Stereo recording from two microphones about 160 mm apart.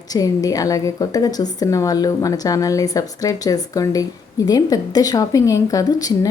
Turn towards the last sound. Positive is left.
turn(degrees=20)  # may be behind; listen again after turning